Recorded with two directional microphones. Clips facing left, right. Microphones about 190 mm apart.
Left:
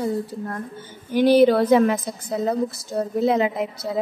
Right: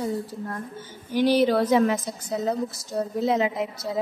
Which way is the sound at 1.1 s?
55° left (ahead or behind).